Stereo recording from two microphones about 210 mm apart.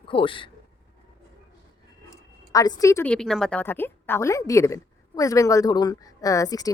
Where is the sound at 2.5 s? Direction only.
15° left (ahead or behind).